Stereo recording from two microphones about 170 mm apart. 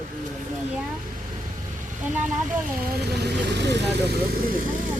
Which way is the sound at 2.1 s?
50° right (ahead or behind).